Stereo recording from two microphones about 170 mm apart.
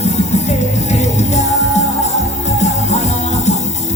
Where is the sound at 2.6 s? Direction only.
40° left (ahead or behind).